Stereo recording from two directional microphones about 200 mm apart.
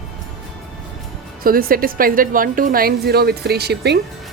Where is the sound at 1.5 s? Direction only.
45° right (ahead or behind).